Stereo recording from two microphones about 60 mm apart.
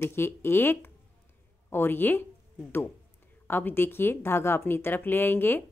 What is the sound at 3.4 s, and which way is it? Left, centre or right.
Speech, left.